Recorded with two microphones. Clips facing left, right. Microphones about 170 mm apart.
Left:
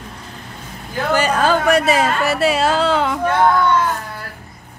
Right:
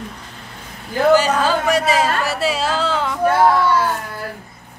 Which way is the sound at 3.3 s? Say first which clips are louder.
Right 2 dB; 5° right (ahead or behind).